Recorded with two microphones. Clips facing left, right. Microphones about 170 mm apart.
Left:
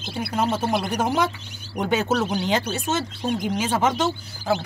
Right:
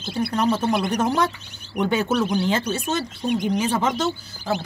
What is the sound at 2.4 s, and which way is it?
Speech, 15° left (ahead or behind).